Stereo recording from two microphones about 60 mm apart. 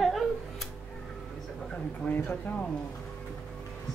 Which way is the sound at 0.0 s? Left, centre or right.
Centre.